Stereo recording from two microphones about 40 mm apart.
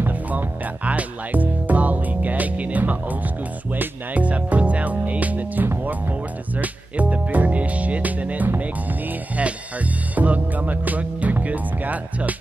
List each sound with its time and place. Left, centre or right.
0.0 s music: right
2.8 s speech: right
4.2 s music: right
5.9 s speech: right
9.4 s music: right